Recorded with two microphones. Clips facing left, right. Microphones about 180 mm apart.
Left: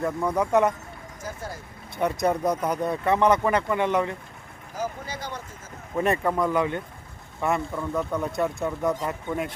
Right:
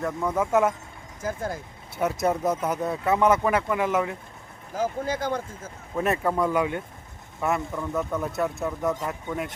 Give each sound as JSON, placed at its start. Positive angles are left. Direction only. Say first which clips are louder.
{"t": 0.0, "sound": "speech", "louder": "left 1 dB", "side_deg": 0}
{"t": 1.2, "sound": "speech", "louder": "right 6 dB", "side_deg": -50}
{"t": 2.0, "sound": "speech", "louder": "left 1 dB", "side_deg": -5}
{"t": 4.7, "sound": "speech", "louder": "right 5 dB", "side_deg": -50}
{"t": 6.0, "sound": "speech", "louder": "left 1 dB", "side_deg": 0}